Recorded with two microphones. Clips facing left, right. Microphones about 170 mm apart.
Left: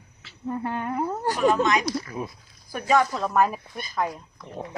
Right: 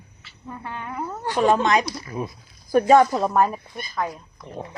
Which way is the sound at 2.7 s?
45° right (ahead or behind).